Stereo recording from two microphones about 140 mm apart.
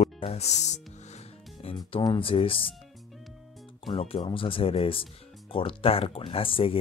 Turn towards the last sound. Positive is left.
turn(degrees=40)  # may be behind; listen again after turning